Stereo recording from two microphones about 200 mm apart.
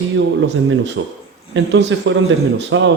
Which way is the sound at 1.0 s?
70° right (ahead or behind).